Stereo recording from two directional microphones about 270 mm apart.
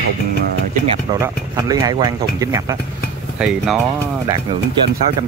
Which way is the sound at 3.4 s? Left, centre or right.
Centre.